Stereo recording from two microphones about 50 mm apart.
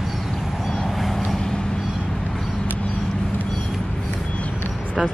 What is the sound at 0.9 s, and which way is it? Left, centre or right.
Vehicle, centre.